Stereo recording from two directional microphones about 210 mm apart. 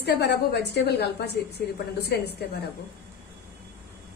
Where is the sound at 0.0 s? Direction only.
50° left (ahead or behind).